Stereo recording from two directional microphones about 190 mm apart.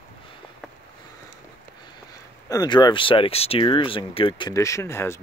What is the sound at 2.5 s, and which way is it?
Speech, 20° left (ahead or behind).